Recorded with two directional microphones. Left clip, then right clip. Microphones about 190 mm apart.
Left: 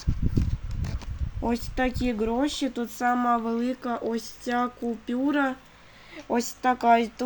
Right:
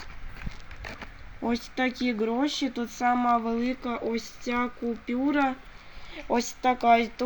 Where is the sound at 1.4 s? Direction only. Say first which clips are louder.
Left 1 dB; centre (ahead or behind).